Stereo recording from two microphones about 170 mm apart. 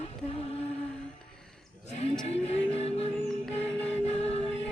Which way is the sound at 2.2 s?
40° left (ahead or behind).